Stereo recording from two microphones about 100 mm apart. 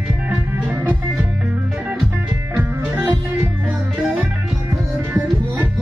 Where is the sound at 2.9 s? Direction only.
30° right (ahead or behind).